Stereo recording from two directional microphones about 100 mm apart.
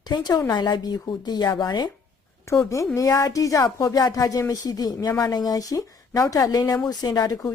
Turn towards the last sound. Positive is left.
turn(degrees=40)  # may be behind; listen again after turning